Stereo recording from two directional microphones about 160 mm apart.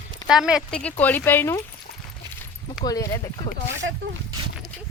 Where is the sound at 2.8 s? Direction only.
20° left (ahead or behind).